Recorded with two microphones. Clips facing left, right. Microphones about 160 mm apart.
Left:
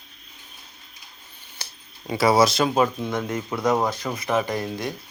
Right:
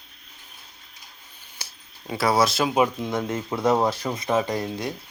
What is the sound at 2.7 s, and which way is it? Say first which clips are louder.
Speech: even; 15° right (ahead or behind).